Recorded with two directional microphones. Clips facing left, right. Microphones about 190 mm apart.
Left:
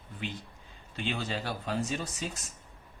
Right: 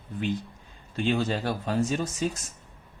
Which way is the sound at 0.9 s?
45° right (ahead or behind).